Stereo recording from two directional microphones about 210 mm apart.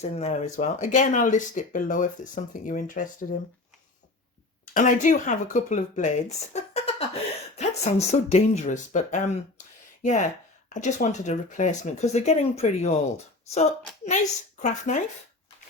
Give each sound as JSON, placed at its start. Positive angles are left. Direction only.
{"t": 0.0, "sound": "speech", "side_deg": 30}
{"t": 4.7, "sound": "speech", "side_deg": 35}